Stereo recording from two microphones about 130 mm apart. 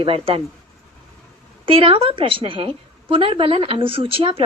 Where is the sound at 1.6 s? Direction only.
45° right (ahead or behind).